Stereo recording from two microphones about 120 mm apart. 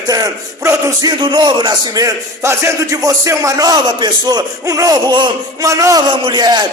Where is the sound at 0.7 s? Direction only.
25° right (ahead or behind).